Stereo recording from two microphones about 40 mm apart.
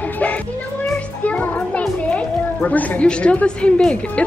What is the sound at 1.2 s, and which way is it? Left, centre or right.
Children playing, left.